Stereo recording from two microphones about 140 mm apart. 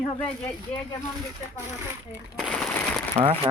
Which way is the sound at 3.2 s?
50° right (ahead or behind).